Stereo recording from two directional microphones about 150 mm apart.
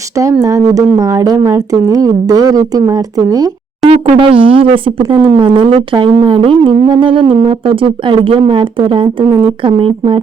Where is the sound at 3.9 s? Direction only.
40° right (ahead or behind).